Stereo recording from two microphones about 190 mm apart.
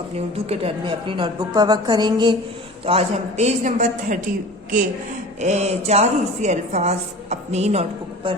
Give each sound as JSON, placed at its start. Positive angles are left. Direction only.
{"t": 0.3, "sound": "a woman's voice", "side_deg": -30}
{"t": 5.4, "sound": "a woman's voice", "side_deg": -35}